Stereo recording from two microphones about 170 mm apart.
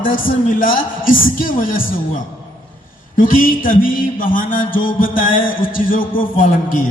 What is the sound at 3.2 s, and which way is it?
Speech, 55° left (ahead or behind).